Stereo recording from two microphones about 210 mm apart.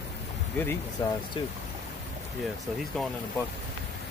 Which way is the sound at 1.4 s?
25° left (ahead or behind).